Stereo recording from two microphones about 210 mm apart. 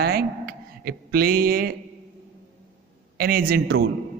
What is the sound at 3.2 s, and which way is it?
Speech, 45° right (ahead or behind).